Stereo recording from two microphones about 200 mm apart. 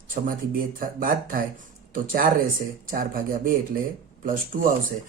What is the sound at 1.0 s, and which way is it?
Speech, 45° right (ahead or behind).